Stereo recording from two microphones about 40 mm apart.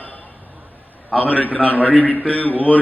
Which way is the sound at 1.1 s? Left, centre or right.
Left.